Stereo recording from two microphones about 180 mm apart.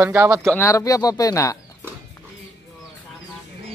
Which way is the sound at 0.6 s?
15° left (ahead or behind).